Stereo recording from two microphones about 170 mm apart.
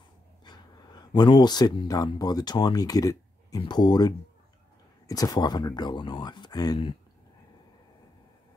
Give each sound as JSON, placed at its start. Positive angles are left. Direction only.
{"t": 0.5, "sound": "a man's voice", "side_deg": 25}